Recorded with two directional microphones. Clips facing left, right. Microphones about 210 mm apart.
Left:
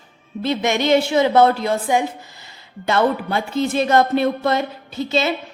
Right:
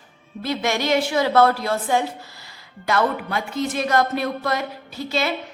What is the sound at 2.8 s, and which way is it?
A woman's voice, 25° left (ahead or behind).